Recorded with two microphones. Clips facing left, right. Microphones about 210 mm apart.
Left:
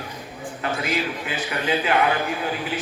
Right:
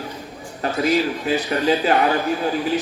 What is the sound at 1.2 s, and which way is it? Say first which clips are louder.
Speech: right 7 dB; 40° right (ahead or behind).